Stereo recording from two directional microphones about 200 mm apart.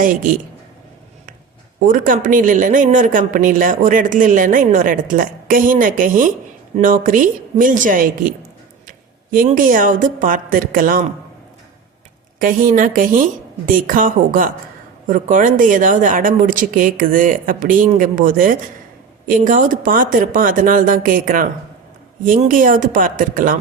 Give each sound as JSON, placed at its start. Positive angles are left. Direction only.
{"t": 0.0, "sound": "speech", "side_deg": -45}
{"t": 1.9, "sound": "speech", "side_deg": -40}
{"t": 12.4, "sound": "speech", "side_deg": -45}